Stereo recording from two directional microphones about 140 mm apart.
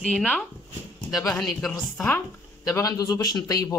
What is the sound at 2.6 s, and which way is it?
A man's voice, 25° left (ahead or behind).